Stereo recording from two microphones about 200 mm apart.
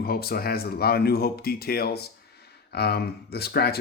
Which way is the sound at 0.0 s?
50° left (ahead or behind).